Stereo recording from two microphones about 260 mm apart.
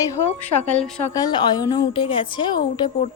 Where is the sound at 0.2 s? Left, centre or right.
Centre.